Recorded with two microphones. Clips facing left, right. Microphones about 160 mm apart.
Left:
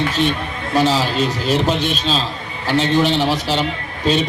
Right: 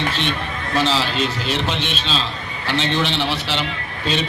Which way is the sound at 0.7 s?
10° left (ahead or behind).